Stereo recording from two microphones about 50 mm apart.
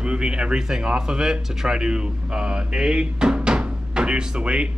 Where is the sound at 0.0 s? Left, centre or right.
Centre.